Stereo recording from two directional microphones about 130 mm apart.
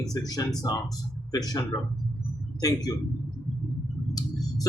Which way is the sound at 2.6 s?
30° left (ahead or behind).